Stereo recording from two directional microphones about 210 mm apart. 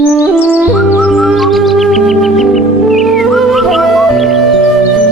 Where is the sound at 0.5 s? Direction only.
5° right (ahead or behind).